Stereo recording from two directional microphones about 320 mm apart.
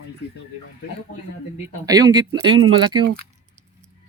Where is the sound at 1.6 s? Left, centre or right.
Centre.